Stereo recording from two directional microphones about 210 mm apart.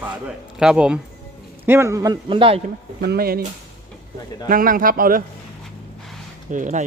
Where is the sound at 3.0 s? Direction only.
50° right (ahead or behind).